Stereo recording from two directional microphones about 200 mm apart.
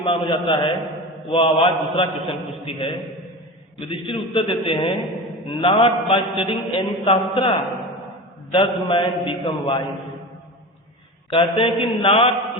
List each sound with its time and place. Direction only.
0.0 s mantra: 25° left (ahead or behind)
11.3 s mantra: 25° left (ahead or behind)